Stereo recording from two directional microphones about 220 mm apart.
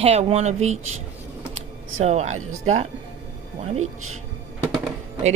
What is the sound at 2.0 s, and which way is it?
Speech, 30° right (ahead or behind).